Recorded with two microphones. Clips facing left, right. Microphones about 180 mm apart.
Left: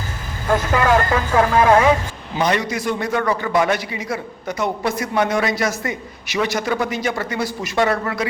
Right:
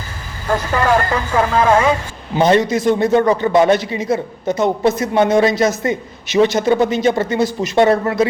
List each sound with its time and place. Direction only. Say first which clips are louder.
1.1 s speech: even; 5° left (ahead or behind)
2.3 s a man's voice: right 7 dB; 25° right (ahead or behind)